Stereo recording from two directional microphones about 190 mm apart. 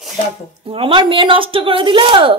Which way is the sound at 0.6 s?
30° right (ahead or behind).